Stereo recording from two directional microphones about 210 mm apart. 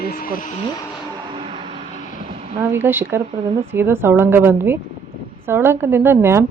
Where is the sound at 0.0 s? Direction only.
45° left (ahead or behind).